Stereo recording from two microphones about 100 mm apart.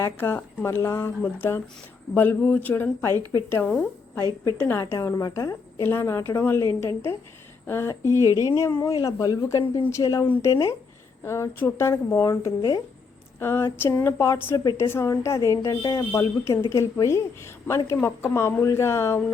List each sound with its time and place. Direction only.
0.0 s a woman's voice: 20° left (ahead or behind); by 16.0 s 40° left (ahead or behind)
16.1 s speech: 30° left (ahead or behind)